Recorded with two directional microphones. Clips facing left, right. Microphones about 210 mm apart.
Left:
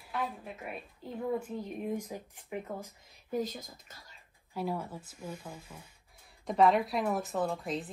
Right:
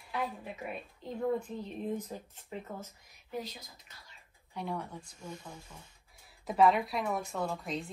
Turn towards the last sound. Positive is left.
turn(degrees=0)  # may be behind; listen again after turning